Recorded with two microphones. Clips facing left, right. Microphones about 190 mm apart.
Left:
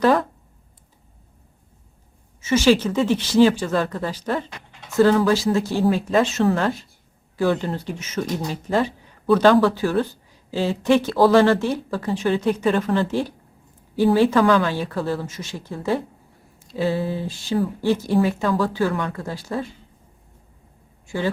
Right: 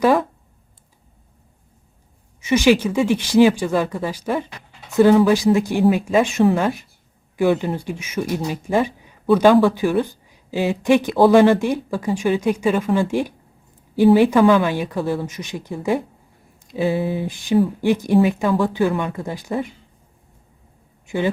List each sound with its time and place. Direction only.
0.0 s speech: 5° right (ahead or behind)
2.4 s speech: 15° right (ahead or behind)
21.1 s speech: 20° right (ahead or behind)